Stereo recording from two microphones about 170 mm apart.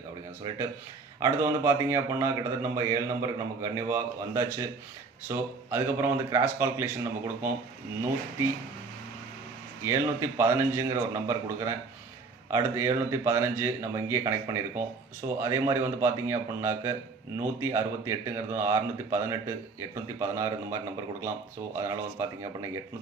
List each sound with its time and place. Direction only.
1.2 s speech: 15° right (ahead or behind)
9.8 s speech: 15° right (ahead or behind)
21.8 s speech: 20° right (ahead or behind)